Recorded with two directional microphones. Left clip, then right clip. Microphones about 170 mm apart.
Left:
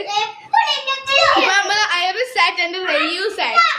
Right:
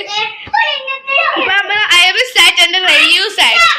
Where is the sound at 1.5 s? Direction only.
15° left (ahead or behind).